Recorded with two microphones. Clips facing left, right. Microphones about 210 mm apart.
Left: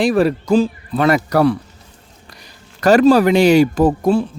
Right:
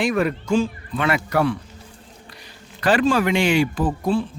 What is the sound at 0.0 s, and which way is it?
Speech, 35° left (ahead or behind).